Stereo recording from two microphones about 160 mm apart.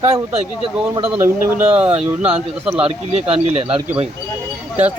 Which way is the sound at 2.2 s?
35° right (ahead or behind).